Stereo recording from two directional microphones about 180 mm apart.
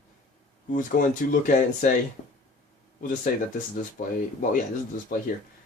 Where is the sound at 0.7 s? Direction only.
50° left (ahead or behind).